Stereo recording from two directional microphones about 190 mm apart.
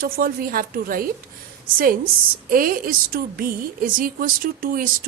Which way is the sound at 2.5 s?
50° right (ahead or behind).